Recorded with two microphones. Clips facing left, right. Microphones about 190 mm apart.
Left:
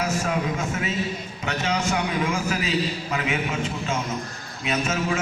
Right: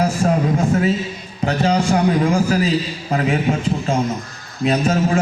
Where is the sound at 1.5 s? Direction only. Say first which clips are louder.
Right 8 dB; 35° right (ahead or behind).